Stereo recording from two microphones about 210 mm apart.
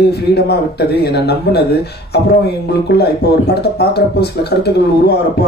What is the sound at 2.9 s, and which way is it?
A man's voice, 50° left (ahead or behind).